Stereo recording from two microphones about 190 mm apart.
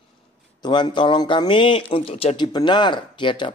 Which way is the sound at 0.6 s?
20° left (ahead or behind).